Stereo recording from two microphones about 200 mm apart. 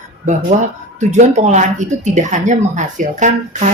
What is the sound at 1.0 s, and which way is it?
Speech, 35° right (ahead or behind).